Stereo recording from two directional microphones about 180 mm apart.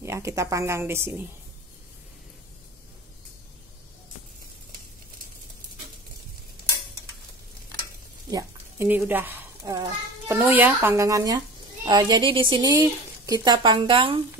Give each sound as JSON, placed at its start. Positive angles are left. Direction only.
{"t": 0.0, "sound": "a woman's voice", "side_deg": -15}
{"t": 8.3, "sound": "a child's voice", "side_deg": -15}